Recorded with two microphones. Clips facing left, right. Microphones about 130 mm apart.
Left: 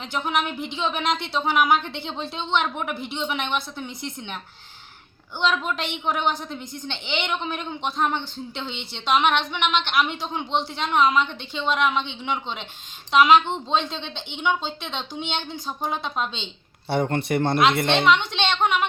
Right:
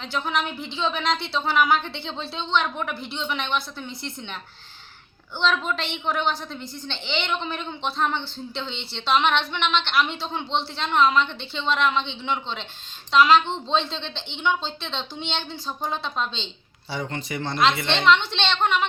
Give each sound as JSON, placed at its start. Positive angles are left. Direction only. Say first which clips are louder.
{"t": 0.0, "sound": "a woman's voice", "louder": "left 1 dB", "side_deg": 15}
{"t": 5.4, "sound": "a woman's voice", "louder": "even", "side_deg": 10}
{"t": 16.9, "sound": "a woman's voice", "louder": "left 8 dB", "side_deg": 55}
{"t": 18.0, "sound": "a woman's voice", "louder": "even", "side_deg": 10}